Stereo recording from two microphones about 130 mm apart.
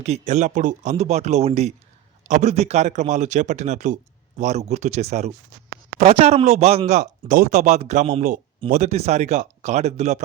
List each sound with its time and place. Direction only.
0.0 s speech: 60° right (ahead or behind)
4.4 s speech: 60° right (ahead or behind)